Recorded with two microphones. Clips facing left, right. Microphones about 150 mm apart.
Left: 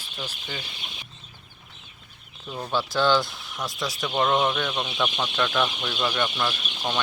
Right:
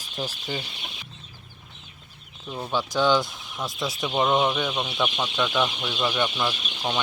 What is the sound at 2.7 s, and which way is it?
Speech, 15° right (ahead or behind).